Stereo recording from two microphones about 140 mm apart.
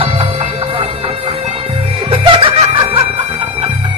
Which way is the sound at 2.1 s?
40° right (ahead or behind).